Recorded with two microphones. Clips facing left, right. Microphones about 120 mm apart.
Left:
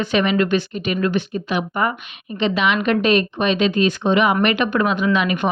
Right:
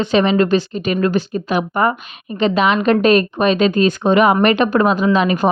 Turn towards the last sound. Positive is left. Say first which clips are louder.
# right 4 dB
turn(degrees=-35)  # may be behind; listen again after turning